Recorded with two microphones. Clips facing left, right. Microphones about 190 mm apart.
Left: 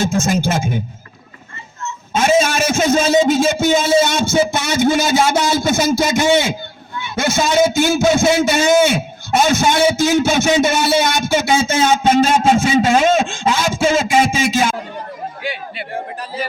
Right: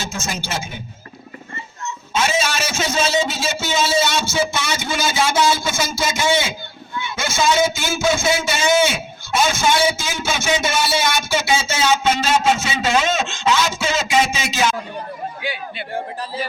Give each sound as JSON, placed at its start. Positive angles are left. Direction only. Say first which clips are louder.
{"t": 0.0, "sound": "a man's voice", "louder": "left 11 dB", "side_deg": 55}
{"t": 2.1, "sound": "a man's voice", "louder": "left 6 dB", "side_deg": 50}